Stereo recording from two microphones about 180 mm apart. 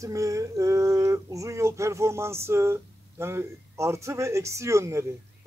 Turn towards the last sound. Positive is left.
turn(degrees=-15)  # may be behind; listen again after turning